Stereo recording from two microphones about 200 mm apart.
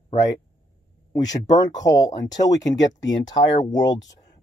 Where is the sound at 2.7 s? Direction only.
65° left (ahead or behind).